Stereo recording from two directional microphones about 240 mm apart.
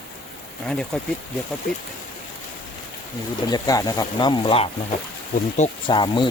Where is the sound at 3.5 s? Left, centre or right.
Centre.